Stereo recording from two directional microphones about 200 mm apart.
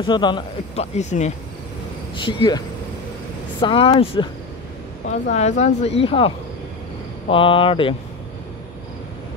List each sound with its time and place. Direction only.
0.0 s speech: 25° left (ahead or behind)
0.9 s speech: 35° left (ahead or behind)
2.1 s speech: 25° left (ahead or behind)
3.6 s speech: 25° left (ahead or behind)
5.3 s speech: 35° left (ahead or behind)